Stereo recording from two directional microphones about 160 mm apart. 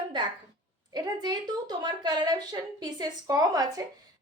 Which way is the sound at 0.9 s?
25° right (ahead or behind).